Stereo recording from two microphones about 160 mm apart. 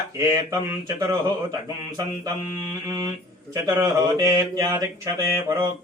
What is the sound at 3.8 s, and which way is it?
Mantra, 25° right (ahead or behind).